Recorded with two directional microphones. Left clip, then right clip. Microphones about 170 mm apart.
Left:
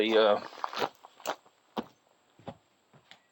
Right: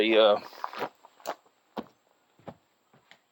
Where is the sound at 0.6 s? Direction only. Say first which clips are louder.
Left 2 dB; 75° left (ahead or behind).